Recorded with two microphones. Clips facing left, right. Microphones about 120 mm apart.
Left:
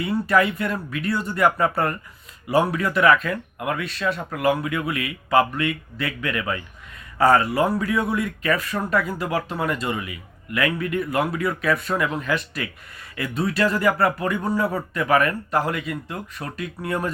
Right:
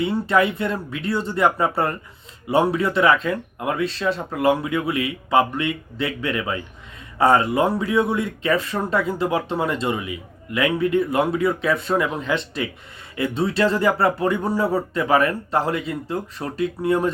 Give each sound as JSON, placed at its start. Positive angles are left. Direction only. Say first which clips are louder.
{"t": 0.0, "sound": "speech", "louder": "right 1 dB", "side_deg": -25}